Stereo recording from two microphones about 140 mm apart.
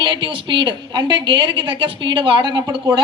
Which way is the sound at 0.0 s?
35° right (ahead or behind).